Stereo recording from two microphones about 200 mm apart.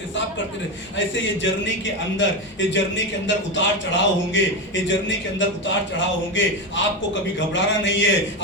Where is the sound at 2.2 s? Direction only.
65° left (ahead or behind).